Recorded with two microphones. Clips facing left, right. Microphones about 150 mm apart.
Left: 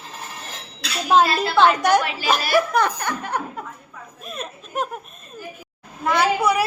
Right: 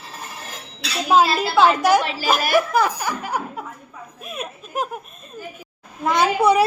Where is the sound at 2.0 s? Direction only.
35° right (ahead or behind).